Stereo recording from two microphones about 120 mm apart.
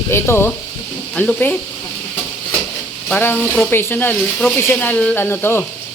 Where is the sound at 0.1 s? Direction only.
20° left (ahead or behind).